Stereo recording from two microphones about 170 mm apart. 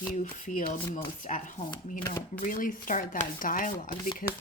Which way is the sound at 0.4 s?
60° left (ahead or behind).